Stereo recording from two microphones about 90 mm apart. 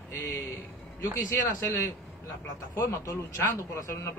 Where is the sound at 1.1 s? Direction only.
35° left (ahead or behind).